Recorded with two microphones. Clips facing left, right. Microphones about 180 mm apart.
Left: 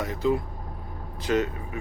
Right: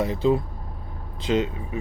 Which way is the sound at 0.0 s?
30° right (ahead or behind).